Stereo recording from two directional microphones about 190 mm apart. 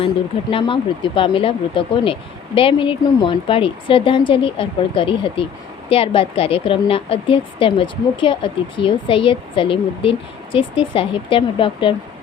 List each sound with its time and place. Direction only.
0.5 s a woman's voice: 25° left (ahead or behind)